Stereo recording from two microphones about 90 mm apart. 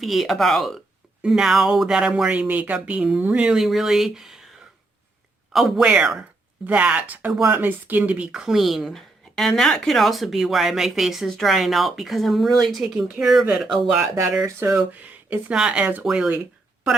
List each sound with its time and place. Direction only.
0.0 s speech: centre (ahead or behind)
5.5 s speech: 5° right (ahead or behind)
14.7 s speech: 20° right (ahead or behind)